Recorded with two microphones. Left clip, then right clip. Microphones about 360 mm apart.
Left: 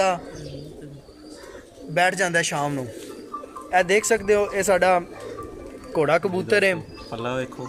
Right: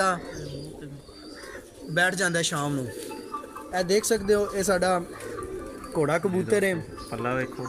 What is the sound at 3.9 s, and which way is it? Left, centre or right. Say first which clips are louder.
Speech: left 4 dB; left.